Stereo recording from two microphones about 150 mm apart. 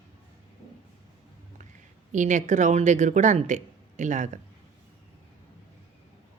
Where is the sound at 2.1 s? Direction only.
55° right (ahead or behind).